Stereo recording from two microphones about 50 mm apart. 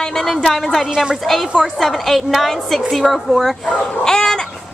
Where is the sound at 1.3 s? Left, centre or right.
Centre.